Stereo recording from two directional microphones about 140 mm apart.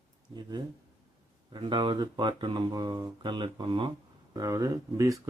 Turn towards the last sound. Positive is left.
turn(degrees=-20)  # may be behind; listen again after turning